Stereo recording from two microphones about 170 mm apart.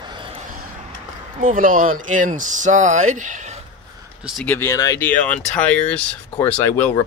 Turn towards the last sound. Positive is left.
turn(degrees=10)  # may be behind; listen again after turning